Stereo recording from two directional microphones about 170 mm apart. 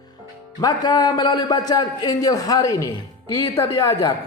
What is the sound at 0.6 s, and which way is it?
A man's voice, 25° left (ahead or behind).